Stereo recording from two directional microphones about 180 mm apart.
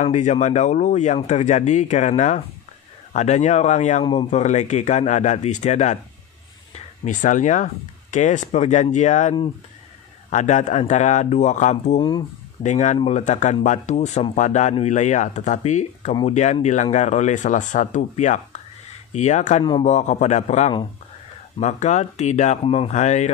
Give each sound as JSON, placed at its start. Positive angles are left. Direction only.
{"t": 0.0, "sound": "speech", "side_deg": 40}
{"t": 4.0, "sound": "a man's voice", "side_deg": 25}
{"t": 4.3, "sound": "speech", "side_deg": 40}
{"t": 12.0, "sound": "a man's voice", "side_deg": 25}
{"t": 12.6, "sound": "speech", "side_deg": 40}